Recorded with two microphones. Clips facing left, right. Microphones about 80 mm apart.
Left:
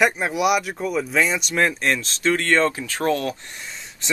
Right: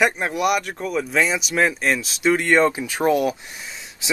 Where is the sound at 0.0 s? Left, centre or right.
Centre.